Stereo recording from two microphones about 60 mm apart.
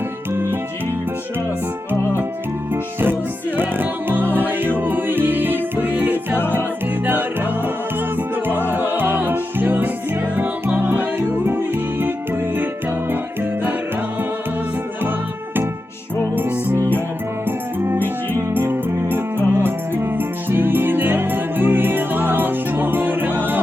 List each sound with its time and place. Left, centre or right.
3.6 s music: right
8.4 s music: right
16.2 s music: right